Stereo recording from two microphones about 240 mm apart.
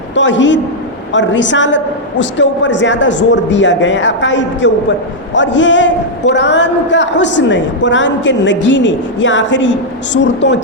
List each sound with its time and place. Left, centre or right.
0.2 s a woman's voice: left